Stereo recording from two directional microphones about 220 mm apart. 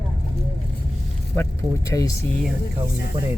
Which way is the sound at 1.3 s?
10° left (ahead or behind).